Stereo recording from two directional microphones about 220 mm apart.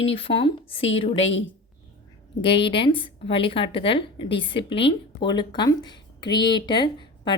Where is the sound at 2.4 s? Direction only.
25° left (ahead or behind).